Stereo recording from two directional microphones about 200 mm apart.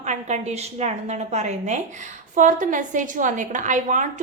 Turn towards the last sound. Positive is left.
turn(degrees=-40)  # may be behind; listen again after turning